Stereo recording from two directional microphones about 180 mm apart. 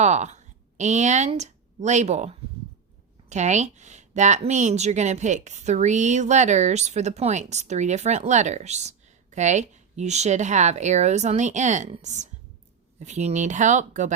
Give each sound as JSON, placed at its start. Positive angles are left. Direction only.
{"t": 0.0, "sound": "a woman's voice", "side_deg": -40}